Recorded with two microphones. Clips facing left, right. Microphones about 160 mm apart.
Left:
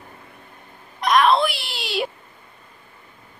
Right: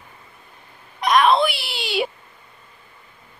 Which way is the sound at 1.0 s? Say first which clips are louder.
Right 1 dB; centre (ahead or behind).